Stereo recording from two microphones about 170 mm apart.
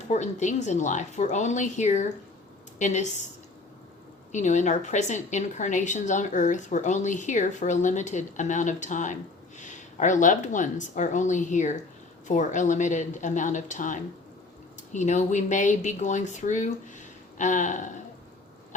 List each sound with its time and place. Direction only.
0.1 s speech: 45° left (ahead or behind)
4.3 s speech: 45° left (ahead or behind)